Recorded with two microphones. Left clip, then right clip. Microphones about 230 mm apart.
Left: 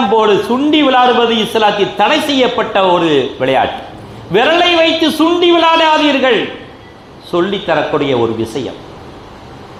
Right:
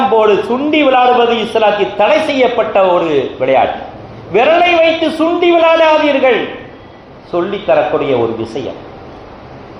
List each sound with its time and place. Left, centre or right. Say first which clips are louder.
0.1 s a man's voice: even; left